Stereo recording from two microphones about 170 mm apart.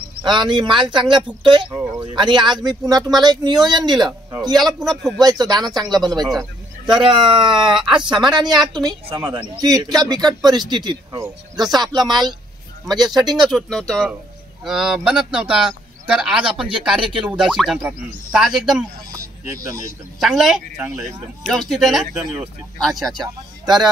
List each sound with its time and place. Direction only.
0.2 s speech: 25° right (ahead or behind)
4.7 s speech: centre (ahead or behind)
5.2 s speech: 25° right (ahead or behind)
7.5 s speech: 5° right (ahead or behind)
8.1 s speech: 25° right (ahead or behind)
13.5 s speech: 5° left (ahead or behind)
16.5 s speech: 30° right (ahead or behind)
16.8 s speech: 5° right (ahead or behind)
19.1 s a sound: 20° right (ahead or behind)
20.2 s speech: centre (ahead or behind)
20.7 s speech: 15° right (ahead or behind)
21.0 s speech: centre (ahead or behind)
23.2 s speech: 25° right (ahead or behind)